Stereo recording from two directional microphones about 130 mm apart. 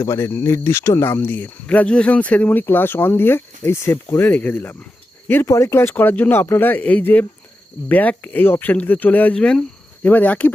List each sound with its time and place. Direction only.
0.0 s speech: 20° left (ahead or behind)